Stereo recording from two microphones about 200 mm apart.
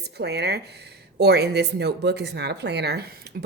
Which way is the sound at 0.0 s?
55° right (ahead or behind).